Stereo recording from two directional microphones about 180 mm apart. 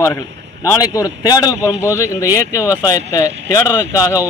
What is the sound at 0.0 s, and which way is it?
A man's voice, 15° left (ahead or behind).